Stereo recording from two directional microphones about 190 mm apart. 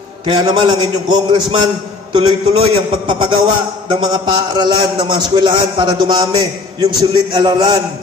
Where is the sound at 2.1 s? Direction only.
25° right (ahead or behind).